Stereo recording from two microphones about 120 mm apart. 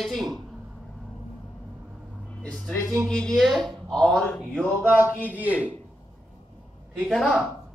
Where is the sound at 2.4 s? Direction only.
5° left (ahead or behind).